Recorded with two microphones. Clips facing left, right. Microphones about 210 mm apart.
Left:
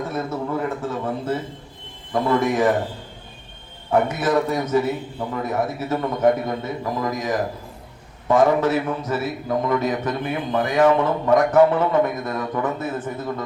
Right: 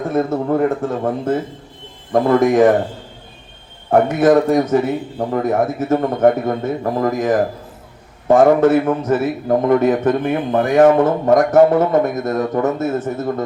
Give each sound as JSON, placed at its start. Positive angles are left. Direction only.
{"t": 0.1, "sound": "a man's voice", "side_deg": -50}
{"t": 3.8, "sound": "a man's voice", "side_deg": -50}